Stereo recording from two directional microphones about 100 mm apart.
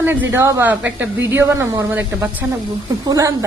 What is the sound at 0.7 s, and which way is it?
Speech, 15° right (ahead or behind).